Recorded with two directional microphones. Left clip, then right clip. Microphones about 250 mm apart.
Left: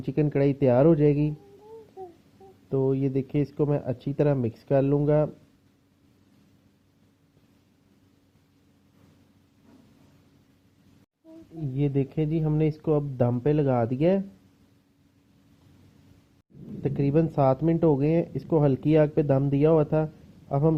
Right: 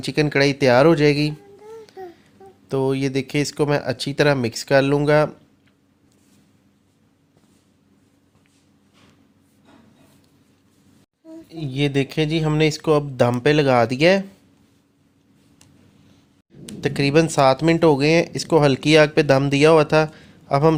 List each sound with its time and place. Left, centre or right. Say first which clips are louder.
0.0 s speech: right 7 dB; centre
2.9 s speech: right 5 dB; centre
11.6 s speech: right 6 dB; centre
16.8 s a man's voice: right 7 dB; centre